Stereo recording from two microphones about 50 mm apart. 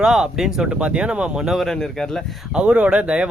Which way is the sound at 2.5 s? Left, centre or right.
Right.